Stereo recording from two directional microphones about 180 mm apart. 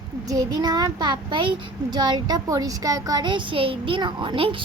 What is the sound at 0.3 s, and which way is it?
A child's voice, 20° right (ahead or behind).